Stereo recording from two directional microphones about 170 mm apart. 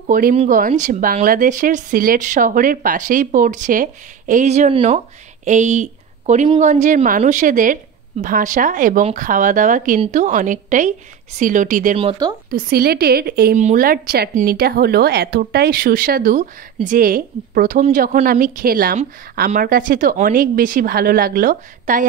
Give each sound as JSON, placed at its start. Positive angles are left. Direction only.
{"t": 0.1, "sound": "speech", "side_deg": -50}
{"t": 12.0, "sound": "speech", "side_deg": -30}
{"t": 12.4, "sound": "a woman's voice", "side_deg": -60}
{"t": 13.6, "sound": "a woman's voice", "side_deg": -50}